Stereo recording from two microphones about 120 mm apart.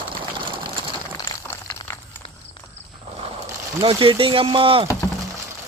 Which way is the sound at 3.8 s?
50° right (ahead or behind).